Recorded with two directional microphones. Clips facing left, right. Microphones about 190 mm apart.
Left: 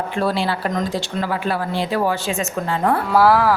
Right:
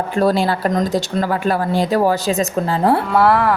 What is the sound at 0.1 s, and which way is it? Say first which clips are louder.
Speech: right 6 dB; 40° right (ahead or behind).